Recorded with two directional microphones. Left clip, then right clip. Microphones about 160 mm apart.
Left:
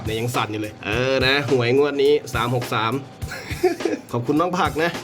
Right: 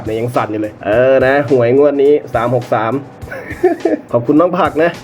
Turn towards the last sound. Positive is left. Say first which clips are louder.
# right 9 dB
turn(degrees=20)  # may be behind; listen again after turning